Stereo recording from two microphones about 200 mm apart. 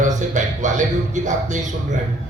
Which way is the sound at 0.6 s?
35° right (ahead or behind).